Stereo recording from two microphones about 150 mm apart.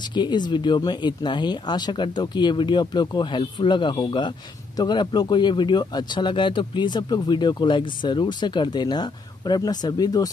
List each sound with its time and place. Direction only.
0.1 s speech: 30° left (ahead or behind)